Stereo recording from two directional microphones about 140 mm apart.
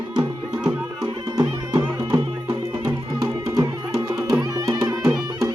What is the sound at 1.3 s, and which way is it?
Music, 30° right (ahead or behind).